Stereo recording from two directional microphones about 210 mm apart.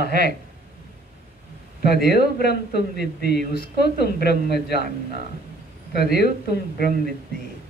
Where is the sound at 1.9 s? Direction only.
50° left (ahead or behind).